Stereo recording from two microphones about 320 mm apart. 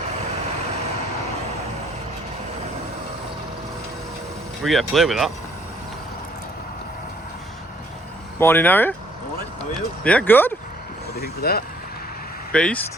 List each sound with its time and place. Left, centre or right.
4.6 s speech: centre
8.4 s speech: centre
10.0 s speech: centre
11.2 s speech: left
12.5 s speech: centre